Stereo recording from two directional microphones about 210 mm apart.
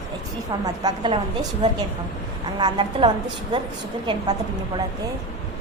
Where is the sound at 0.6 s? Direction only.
20° right (ahead or behind).